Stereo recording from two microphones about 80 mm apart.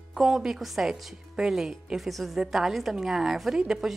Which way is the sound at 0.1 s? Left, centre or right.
Centre.